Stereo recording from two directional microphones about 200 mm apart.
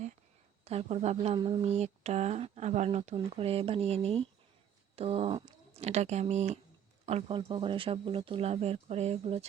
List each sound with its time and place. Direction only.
0.6 s speech: 30° right (ahead or behind)